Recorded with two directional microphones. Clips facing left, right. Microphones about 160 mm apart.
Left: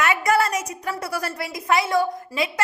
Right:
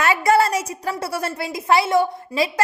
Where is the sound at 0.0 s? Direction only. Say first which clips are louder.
Right 3 dB; 30° right (ahead or behind).